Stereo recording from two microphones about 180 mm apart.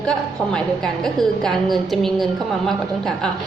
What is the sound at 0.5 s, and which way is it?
A woman's voice, 5° left (ahead or behind).